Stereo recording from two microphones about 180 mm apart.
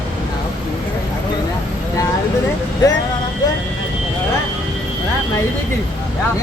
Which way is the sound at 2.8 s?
20° left (ahead or behind).